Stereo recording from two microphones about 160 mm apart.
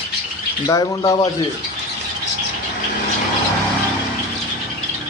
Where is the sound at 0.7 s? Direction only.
25° left (ahead or behind).